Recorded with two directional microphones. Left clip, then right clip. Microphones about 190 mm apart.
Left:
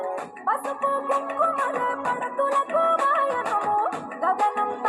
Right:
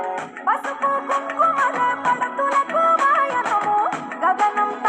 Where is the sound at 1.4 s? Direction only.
25° right (ahead or behind).